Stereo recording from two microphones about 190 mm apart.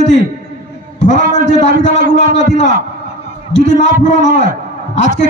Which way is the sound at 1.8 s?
35° left (ahead or behind).